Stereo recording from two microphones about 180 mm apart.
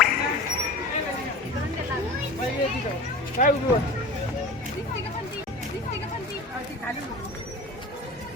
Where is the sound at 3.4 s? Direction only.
45° left (ahead or behind).